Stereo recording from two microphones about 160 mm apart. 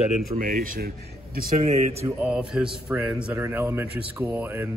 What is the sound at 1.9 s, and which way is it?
Speech, 15° right (ahead or behind).